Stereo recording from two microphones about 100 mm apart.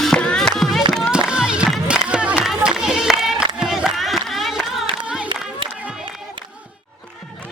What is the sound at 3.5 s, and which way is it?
Crowd, 5° right (ahead or behind).